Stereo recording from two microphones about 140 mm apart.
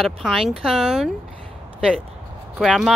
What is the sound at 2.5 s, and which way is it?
Speech, centre (ahead or behind).